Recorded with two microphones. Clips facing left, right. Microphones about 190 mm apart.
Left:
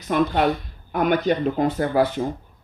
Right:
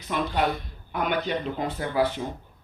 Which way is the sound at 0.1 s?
50° left (ahead or behind).